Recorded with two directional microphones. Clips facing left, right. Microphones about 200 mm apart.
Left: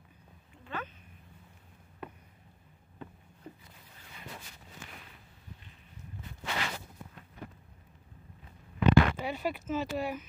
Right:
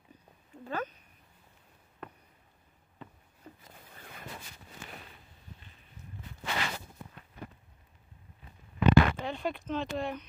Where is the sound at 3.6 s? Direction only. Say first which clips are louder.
Right 4 dB; 50° right (ahead or behind).